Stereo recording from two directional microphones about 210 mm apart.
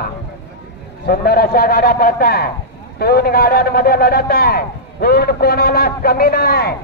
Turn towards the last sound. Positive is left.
turn(degrees=50)  # may be behind; listen again after turning